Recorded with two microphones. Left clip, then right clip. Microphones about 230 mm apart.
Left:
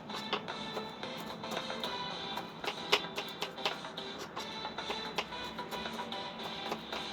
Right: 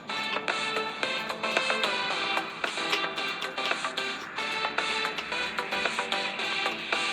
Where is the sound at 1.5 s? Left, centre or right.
Right.